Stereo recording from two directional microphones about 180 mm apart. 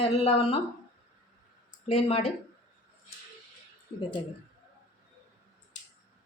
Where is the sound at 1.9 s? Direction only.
35° left (ahead or behind).